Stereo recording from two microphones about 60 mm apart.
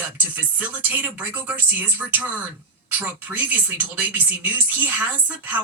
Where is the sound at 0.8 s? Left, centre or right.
Right.